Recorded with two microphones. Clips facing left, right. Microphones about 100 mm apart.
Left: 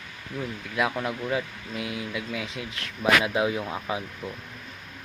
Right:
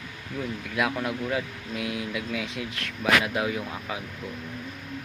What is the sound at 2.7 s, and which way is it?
Speech, 25° left (ahead or behind).